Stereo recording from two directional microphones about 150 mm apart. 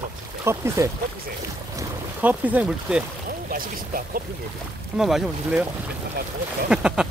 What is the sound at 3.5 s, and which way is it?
Speech, 75° right (ahead or behind).